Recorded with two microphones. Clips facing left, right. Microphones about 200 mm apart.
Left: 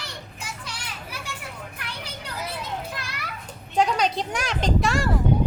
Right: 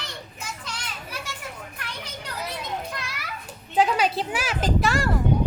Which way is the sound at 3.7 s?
5° right (ahead or behind).